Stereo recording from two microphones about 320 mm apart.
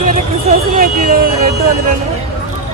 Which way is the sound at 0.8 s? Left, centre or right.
Right.